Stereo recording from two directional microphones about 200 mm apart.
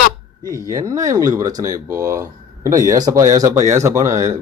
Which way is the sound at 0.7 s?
15° right (ahead or behind).